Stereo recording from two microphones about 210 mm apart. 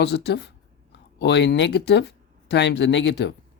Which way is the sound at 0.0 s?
55° left (ahead or behind).